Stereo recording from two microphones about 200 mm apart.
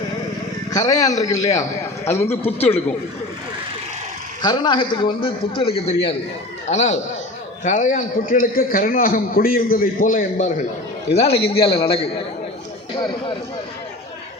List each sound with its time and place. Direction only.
0.7 s a man's voice: 15° left (ahead or behind)
4.4 s a man's voice: 20° left (ahead or behind)